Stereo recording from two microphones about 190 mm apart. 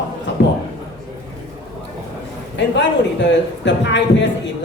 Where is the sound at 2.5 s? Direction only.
70° left (ahead or behind).